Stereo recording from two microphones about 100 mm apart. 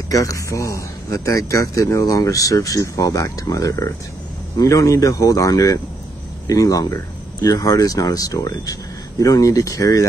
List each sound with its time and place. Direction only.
0.1 s speech: 35° left (ahead or behind)